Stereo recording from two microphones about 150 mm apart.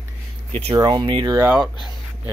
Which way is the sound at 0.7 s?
30° right (ahead or behind).